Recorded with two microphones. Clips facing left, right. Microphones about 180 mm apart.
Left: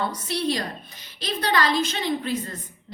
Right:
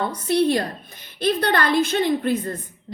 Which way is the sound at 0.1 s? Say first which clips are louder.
Right 7 dB; 55° right (ahead or behind).